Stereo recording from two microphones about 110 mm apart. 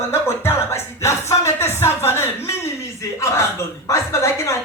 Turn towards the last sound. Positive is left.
turn(degrees=25)  # may be behind; listen again after turning